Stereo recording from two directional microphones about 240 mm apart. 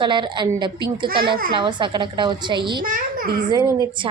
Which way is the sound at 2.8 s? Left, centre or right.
Right.